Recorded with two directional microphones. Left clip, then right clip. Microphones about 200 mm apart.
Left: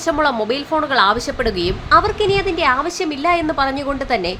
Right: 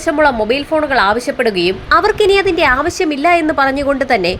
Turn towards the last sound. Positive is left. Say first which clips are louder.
# right 6 dB
turn(degrees=-20)  # may be behind; listen again after turning